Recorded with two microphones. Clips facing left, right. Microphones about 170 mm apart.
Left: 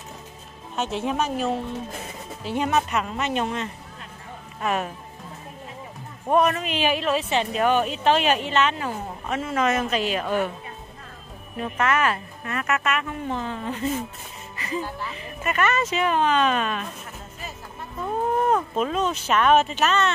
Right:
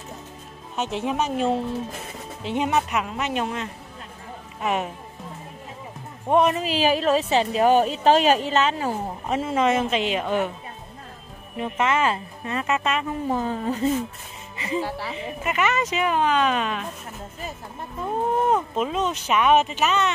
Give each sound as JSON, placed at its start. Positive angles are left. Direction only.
{"t": 0.7, "sound": "speech", "side_deg": -15}
{"t": 6.2, "sound": "speech", "side_deg": -20}
{"t": 6.7, "sound": "a woman's voice", "side_deg": -35}
{"t": 11.5, "sound": "speech", "side_deg": -20}
{"t": 13.3, "sound": "a woman's voice", "side_deg": -40}
{"t": 14.8, "sound": "speech", "side_deg": -90}
{"t": 15.1, "sound": "speech", "side_deg": -15}
{"t": 18.5, "sound": "speech", "side_deg": -15}